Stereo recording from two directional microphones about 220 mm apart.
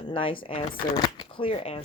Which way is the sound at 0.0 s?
25° left (ahead or behind).